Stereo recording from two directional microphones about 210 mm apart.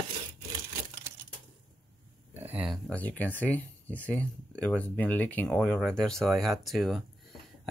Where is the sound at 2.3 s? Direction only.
10° right (ahead or behind).